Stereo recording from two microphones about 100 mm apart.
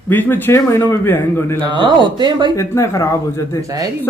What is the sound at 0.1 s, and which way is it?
Speech, 20° left (ahead or behind).